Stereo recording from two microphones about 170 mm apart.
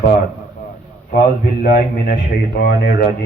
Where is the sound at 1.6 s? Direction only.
55° left (ahead or behind).